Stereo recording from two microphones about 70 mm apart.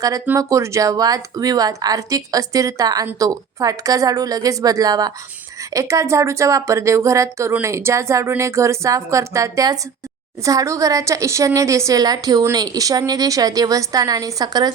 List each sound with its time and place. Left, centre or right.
0.3 s a woman's voice: right
5.7 s a woman's voice: right